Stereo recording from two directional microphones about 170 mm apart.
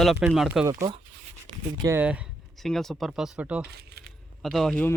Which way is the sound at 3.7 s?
70° right (ahead or behind).